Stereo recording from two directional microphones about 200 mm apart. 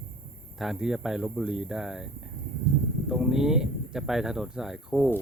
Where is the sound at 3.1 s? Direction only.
Centre (ahead or behind).